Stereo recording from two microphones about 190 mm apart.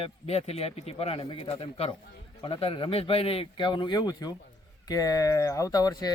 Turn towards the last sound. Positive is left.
turn(degrees=20)  # may be behind; listen again after turning